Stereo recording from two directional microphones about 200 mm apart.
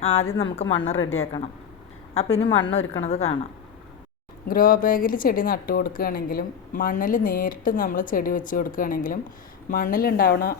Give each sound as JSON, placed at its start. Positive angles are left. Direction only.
{"t": 0.0, "sound": "a woman's voice", "side_deg": 30}
{"t": 4.4, "sound": "speech", "side_deg": 45}